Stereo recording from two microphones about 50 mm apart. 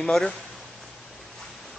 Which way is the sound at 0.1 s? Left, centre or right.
Centre.